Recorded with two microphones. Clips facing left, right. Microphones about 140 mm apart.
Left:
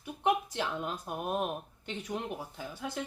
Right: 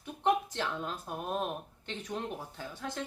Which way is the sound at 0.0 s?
10° left (ahead or behind).